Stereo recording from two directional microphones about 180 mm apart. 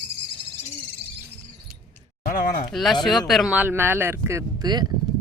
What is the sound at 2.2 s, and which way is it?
Speech, 50° left (ahead or behind).